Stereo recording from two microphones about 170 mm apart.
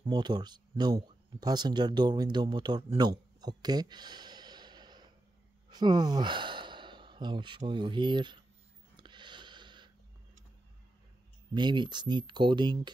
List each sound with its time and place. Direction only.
0.0 s speech: 25° right (ahead or behind)
8.9 s a sound: 25° right (ahead or behind)
11.5 s speech: 25° right (ahead or behind)